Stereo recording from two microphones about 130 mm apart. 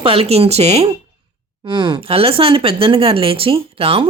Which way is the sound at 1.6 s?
40° right (ahead or behind).